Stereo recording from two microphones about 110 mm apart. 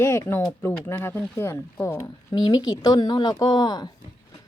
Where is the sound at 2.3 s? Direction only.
40° left (ahead or behind).